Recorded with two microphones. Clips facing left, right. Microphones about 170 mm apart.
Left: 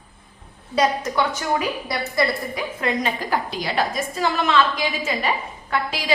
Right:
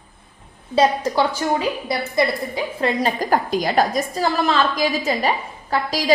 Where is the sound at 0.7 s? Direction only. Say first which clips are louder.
Right 3 dB; 30° right (ahead or behind).